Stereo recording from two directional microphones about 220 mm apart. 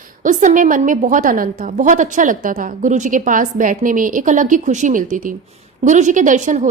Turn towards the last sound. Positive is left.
turn(degrees=-35)  # may be behind; listen again after turning